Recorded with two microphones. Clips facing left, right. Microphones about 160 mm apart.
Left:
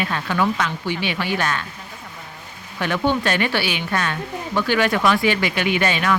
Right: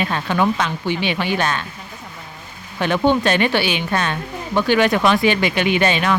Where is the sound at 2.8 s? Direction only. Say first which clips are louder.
Right 4 dB; 25° right (ahead or behind).